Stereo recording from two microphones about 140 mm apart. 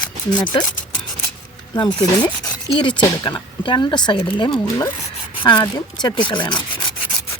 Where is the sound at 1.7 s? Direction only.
30° left (ahead or behind).